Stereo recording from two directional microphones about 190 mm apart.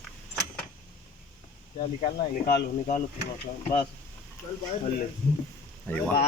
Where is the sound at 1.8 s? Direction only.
45° left (ahead or behind).